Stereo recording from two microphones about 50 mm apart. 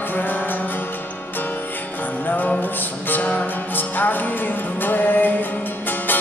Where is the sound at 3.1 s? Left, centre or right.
Left.